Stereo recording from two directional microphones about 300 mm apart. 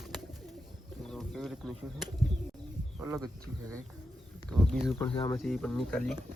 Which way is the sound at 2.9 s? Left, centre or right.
Centre.